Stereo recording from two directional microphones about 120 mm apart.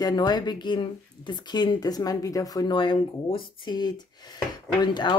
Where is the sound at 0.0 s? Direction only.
35° left (ahead or behind).